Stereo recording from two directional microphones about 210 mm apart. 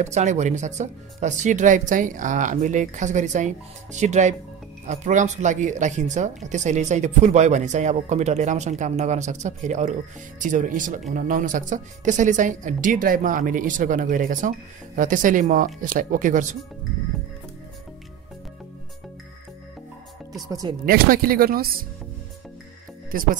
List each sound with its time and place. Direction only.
0.0 s speech: 35° right (ahead or behind)
20.4 s speech: 20° right (ahead or behind)
20.8 s speech: 45° right (ahead or behind)
23.1 s speech: 40° right (ahead or behind)